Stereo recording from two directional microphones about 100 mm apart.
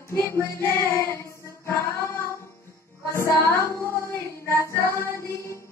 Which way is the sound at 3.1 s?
25° left (ahead or behind).